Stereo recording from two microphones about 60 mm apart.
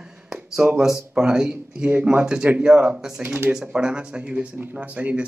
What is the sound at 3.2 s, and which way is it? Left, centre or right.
Speech, right.